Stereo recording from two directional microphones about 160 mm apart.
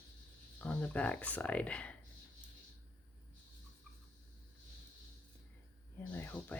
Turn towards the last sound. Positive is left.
turn(degrees=10)  # may be behind; listen again after turning